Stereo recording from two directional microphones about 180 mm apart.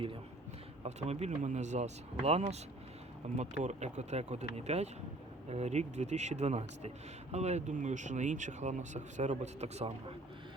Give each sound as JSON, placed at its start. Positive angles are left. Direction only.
{"t": 0.8, "sound": "a man's voice", "side_deg": -35}